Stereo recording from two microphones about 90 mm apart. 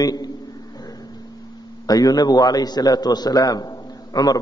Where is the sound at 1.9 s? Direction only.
45° left (ahead or behind).